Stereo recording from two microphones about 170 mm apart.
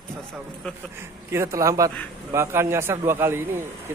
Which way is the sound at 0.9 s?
15° right (ahead or behind).